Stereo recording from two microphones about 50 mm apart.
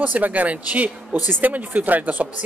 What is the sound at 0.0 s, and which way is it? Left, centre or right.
Speech, right.